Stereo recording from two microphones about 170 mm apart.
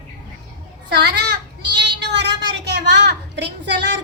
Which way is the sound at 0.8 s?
75° right (ahead or behind).